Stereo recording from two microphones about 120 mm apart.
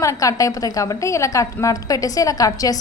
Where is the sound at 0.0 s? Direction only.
25° left (ahead or behind).